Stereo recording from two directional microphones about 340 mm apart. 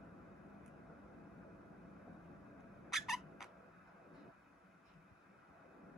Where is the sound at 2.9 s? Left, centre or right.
Centre.